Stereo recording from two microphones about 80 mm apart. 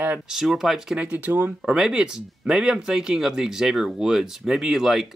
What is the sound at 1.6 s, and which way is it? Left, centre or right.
Speech, centre.